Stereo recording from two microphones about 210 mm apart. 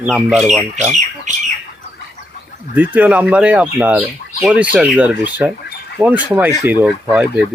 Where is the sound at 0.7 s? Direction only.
35° right (ahead or behind).